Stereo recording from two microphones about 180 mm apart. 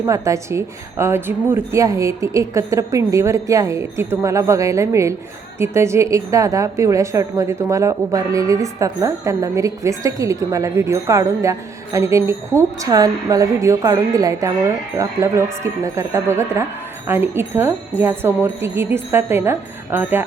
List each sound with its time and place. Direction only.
0.0 s a woman's voice: 15° right (ahead or behind)